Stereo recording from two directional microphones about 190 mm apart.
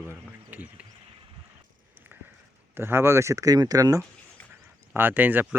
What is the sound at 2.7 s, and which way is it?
Speech, 10° right (ahead or behind).